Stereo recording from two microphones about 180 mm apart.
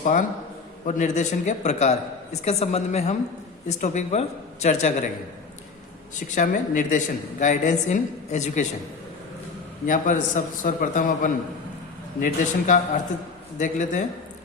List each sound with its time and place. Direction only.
0.0 s a man's voice: 45° left (ahead or behind)
6.1 s a woman's voice: 45° left (ahead or behind)
9.8 s a woman's voice: 45° left (ahead or behind)